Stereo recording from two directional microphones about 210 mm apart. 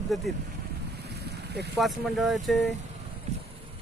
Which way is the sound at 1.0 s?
50° right (ahead or behind).